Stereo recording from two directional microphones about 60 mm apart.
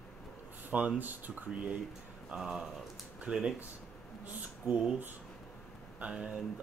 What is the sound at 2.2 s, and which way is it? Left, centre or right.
Speech, centre.